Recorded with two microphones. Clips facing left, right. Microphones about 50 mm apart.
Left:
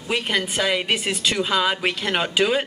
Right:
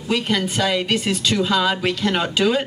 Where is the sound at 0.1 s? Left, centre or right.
Centre.